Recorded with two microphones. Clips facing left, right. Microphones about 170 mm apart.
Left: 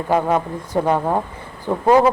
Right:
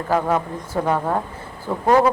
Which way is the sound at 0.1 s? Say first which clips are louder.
Left 2 dB; 15° left (ahead or behind).